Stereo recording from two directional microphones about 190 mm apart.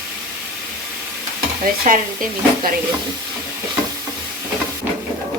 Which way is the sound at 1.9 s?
45° right (ahead or behind).